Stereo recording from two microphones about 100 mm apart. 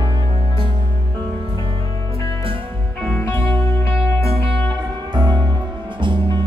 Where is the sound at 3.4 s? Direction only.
60° right (ahead or behind).